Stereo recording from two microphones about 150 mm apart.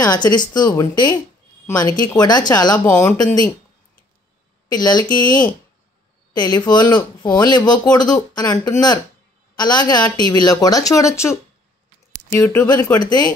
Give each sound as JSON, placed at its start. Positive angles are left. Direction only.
{"t": 0.0, "sound": "speech", "side_deg": 25}
{"t": 2.8, "sound": "speech", "side_deg": 10}
{"t": 4.6, "sound": "speech", "side_deg": 25}
{"t": 6.3, "sound": "speech", "side_deg": 25}
{"t": 12.4, "sound": "speech", "side_deg": 20}